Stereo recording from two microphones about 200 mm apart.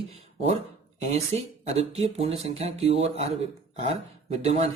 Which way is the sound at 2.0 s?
30° right (ahead or behind).